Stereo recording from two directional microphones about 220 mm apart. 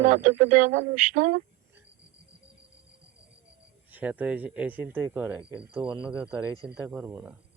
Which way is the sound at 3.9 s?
5° right (ahead or behind).